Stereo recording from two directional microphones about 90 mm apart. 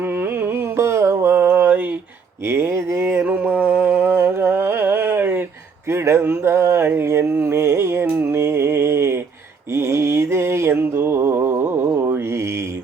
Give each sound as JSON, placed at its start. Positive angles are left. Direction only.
{"t": 0.0, "sound": "carnatic music", "side_deg": -25}
{"t": 2.5, "sound": "a sound", "side_deg": -30}
{"t": 8.0, "sound": "mantra", "side_deg": -25}
{"t": 11.9, "sound": "mantra", "side_deg": -30}